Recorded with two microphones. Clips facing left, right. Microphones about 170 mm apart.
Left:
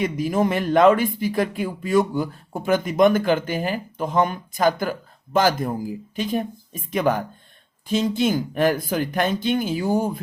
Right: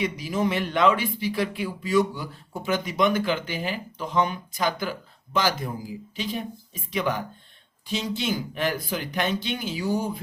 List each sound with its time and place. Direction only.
0.0 s speech: 50° left (ahead or behind)